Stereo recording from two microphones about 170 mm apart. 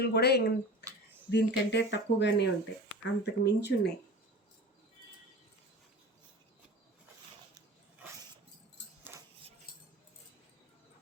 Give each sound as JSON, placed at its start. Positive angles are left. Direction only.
{"t": 0.0, "sound": "speech", "side_deg": 75}
{"t": 1.3, "sound": "speech", "side_deg": 90}
{"t": 3.0, "sound": "speech", "side_deg": 80}